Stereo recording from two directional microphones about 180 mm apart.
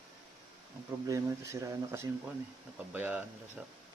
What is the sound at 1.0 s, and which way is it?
Speech, 15° right (ahead or behind).